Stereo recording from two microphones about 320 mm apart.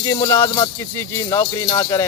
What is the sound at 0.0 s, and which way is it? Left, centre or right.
Speech, centre.